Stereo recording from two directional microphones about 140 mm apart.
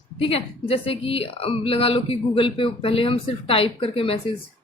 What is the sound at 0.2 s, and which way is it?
Speech, 45° left (ahead or behind).